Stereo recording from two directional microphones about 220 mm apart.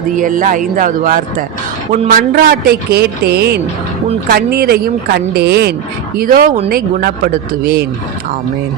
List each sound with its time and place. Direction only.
0.2 s a man's voice: 35° right (ahead or behind)